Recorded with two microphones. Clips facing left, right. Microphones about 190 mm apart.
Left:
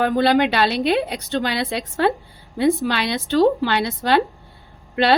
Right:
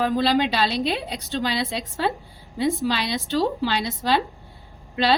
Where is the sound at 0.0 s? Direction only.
55° left (ahead or behind).